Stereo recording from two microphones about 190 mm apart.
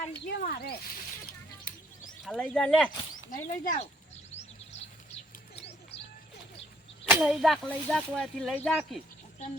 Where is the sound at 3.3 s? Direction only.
45° left (ahead or behind).